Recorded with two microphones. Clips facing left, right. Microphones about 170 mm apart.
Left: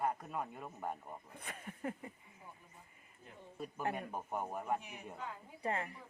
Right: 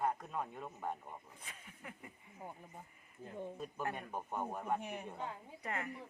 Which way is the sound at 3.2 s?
90° right.